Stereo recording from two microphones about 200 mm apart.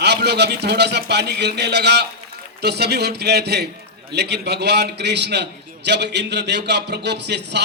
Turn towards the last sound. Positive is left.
turn(degrees=-60)  # may be behind; listen again after turning